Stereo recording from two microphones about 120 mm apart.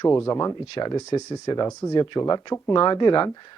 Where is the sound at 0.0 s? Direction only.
25° left (ahead or behind).